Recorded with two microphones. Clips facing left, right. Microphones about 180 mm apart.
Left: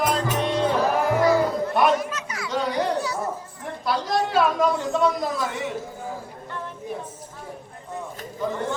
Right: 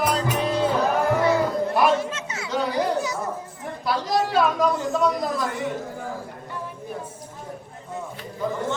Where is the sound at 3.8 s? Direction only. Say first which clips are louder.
Right 1 dB; centre (ahead or behind).